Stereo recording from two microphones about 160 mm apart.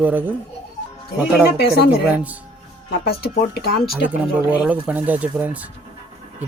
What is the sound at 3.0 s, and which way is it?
Speech, 75° left (ahead or behind).